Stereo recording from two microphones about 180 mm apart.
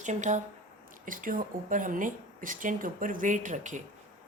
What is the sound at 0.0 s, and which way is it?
Speech, 45° right (ahead or behind).